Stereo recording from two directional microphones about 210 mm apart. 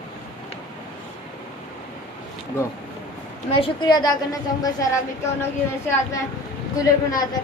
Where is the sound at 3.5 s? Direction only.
25° left (ahead or behind).